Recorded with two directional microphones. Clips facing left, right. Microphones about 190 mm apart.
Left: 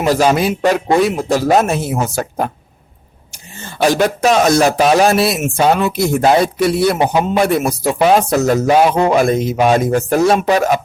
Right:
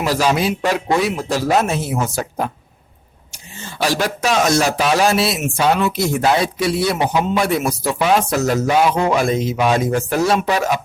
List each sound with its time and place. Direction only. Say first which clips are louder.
0.0 s speech: left 4 dB; 50° left (ahead or behind)